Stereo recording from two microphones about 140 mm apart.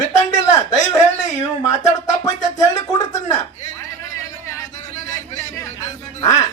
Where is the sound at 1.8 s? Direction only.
25° left (ahead or behind).